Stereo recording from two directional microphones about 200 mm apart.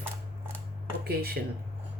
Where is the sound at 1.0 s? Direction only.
50° right (ahead or behind).